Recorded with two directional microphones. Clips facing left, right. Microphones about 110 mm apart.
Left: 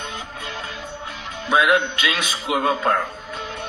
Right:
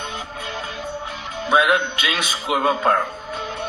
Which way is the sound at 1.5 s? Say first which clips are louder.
Even; 25° right (ahead or behind).